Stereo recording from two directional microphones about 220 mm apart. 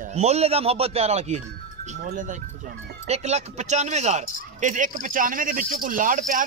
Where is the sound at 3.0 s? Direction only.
30° right (ahead or behind).